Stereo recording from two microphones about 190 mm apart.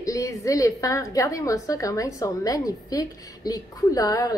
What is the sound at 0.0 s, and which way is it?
A woman's voice, 20° left (ahead or behind).